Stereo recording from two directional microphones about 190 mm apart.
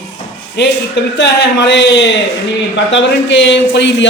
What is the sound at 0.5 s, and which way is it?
A man's voice, 65° left (ahead or behind).